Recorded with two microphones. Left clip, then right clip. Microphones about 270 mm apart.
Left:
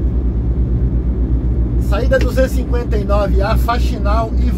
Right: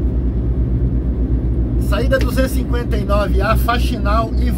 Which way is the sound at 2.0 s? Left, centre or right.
Centre.